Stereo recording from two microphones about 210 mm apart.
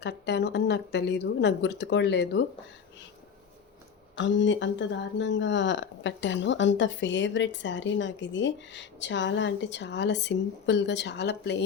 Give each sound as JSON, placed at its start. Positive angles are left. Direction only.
{"t": 0.0, "sound": "speech", "side_deg": 55}
{"t": 4.2, "sound": "speech", "side_deg": 60}